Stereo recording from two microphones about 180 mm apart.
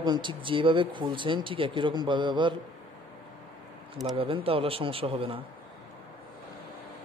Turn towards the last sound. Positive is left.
turn(degrees=-30)  # may be behind; listen again after turning